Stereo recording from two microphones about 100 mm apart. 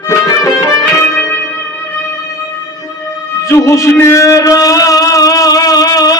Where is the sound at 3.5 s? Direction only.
30° left (ahead or behind).